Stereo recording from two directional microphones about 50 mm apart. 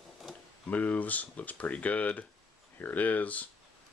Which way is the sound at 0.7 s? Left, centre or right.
Left.